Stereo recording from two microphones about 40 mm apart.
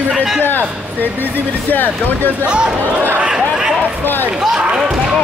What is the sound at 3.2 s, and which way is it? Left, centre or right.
Chatter, centre.